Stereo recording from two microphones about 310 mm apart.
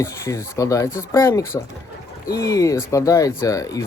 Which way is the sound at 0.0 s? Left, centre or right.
Centre.